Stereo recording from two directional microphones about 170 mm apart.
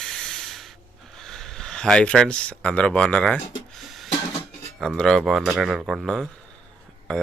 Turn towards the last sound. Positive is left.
turn(degrees=5)  # may be behind; listen again after turning